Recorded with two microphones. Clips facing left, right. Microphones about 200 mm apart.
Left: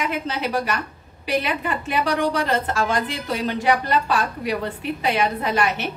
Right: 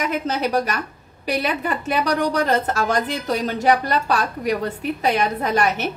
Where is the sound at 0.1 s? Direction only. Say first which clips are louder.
Right 3 dB; 40° right (ahead or behind).